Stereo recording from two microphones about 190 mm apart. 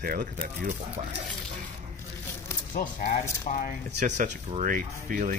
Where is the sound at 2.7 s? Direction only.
45° left (ahead or behind).